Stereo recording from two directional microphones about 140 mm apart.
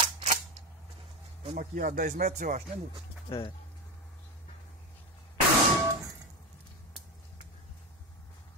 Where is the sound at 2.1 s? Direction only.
60° right (ahead or behind).